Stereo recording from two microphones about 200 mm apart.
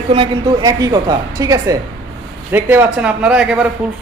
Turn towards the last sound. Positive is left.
turn(degrees=-5)  # may be behind; listen again after turning